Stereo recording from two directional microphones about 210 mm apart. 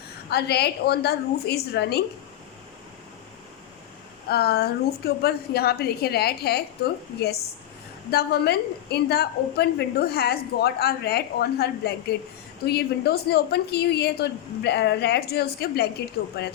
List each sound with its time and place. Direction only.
0.3 s a woman's voice: 50° left (ahead or behind)
4.3 s a woman's voice: 50° left (ahead or behind)